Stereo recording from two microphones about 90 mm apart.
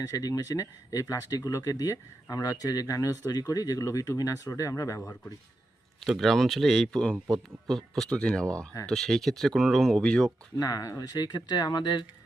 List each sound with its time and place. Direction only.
0.1 s speech: 45° left (ahead or behind)
6.0 s speech: centre (ahead or behind)
10.6 s speech: 45° left (ahead or behind)